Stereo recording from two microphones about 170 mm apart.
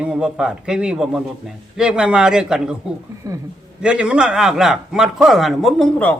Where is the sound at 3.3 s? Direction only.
20° right (ahead or behind).